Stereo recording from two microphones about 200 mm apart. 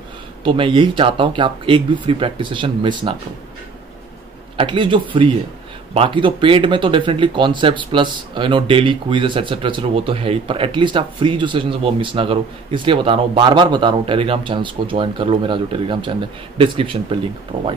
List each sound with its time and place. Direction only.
0.4 s speech: 25° right (ahead or behind)
4.6 s speech: 25° right (ahead or behind)